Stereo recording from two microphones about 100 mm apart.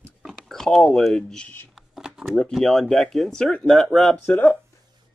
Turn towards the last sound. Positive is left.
turn(degrees=20)  # may be behind; listen again after turning